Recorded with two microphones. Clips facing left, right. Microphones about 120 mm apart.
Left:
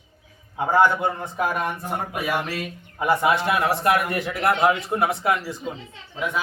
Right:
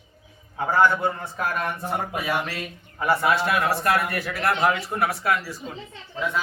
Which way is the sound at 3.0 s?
15° left (ahead or behind).